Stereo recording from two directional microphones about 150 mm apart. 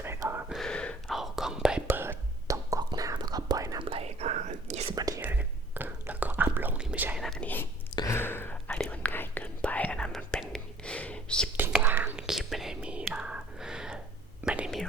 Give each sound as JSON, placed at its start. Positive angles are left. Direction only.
{"t": 0.0, "sound": "a sound", "side_deg": -15}
{"t": 0.5, "sound": "whispering", "side_deg": 5}
{"t": 1.9, "sound": "whispering", "side_deg": -15}
{"t": 3.8, "sound": "whispering", "side_deg": -40}
{"t": 4.9, "sound": "whispering", "side_deg": -25}
{"t": 5.2, "sound": "whispering", "side_deg": -10}
{"t": 7.2, "sound": "whispering", "side_deg": 5}
{"t": 11.5, "sound": "whispering", "side_deg": -15}